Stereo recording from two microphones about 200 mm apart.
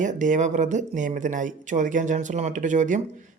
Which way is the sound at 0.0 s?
40° right (ahead or behind).